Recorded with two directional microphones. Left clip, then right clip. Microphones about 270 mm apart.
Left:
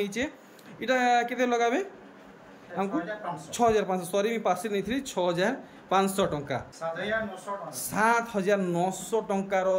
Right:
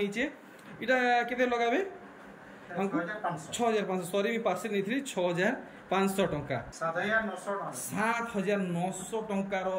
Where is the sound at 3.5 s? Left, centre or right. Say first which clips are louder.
Left 6 dB; centre.